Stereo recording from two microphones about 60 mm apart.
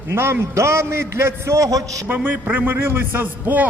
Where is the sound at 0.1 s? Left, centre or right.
Right.